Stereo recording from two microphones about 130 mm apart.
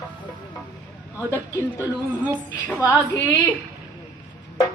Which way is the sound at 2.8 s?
25° left (ahead or behind).